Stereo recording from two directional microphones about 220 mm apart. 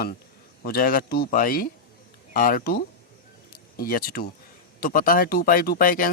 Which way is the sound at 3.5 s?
40° left (ahead or behind).